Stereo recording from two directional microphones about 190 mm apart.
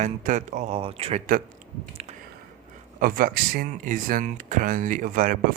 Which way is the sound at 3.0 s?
45° right (ahead or behind).